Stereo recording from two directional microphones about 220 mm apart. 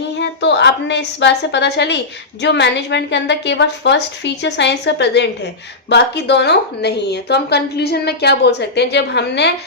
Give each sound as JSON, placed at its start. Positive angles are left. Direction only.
{"t": 0.2, "sound": "a woman's voice", "side_deg": 50}